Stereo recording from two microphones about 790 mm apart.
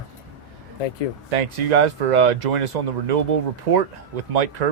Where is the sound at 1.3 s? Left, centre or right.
Right.